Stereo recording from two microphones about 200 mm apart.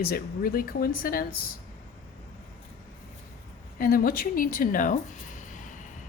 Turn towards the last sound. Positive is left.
turn(degrees=40)  # may be behind; listen again after turning